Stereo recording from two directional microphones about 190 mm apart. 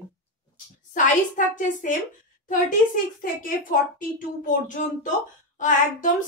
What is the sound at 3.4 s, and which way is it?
A child's voice, 45° left (ahead or behind).